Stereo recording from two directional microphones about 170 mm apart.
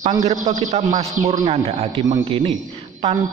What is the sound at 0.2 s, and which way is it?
A man's voice, 45° right (ahead or behind).